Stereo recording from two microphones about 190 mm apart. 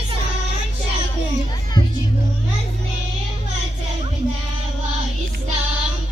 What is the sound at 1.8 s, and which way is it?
Music, 20° left (ahead or behind).